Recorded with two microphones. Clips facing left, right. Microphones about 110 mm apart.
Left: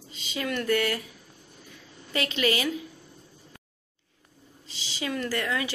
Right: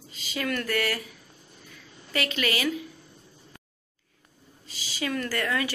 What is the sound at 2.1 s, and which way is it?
Speech, 25° left (ahead or behind).